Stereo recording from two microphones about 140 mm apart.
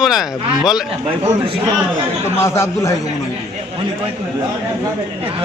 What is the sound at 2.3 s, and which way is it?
Speech, 20° left (ahead or behind).